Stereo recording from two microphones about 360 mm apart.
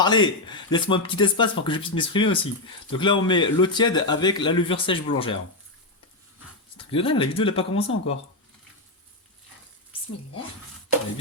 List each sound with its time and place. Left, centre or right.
0.0 s speech: centre
6.7 s speech: centre